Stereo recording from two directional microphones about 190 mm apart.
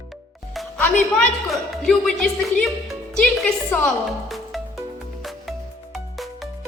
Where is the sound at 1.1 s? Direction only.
Centre (ahead or behind).